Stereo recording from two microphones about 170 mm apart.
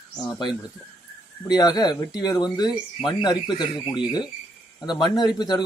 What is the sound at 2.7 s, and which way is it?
Speech, centre (ahead or behind).